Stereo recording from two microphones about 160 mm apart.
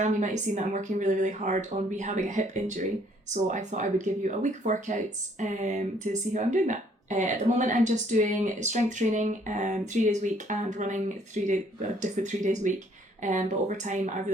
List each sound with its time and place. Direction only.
0.0 s speech: 50° right (ahead or behind)